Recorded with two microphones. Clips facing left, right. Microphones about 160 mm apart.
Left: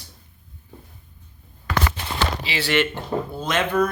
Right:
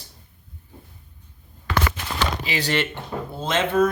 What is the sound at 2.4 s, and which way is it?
Speech, 45° right (ahead or behind).